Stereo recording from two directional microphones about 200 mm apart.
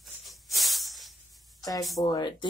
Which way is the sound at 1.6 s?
20° left (ahead or behind).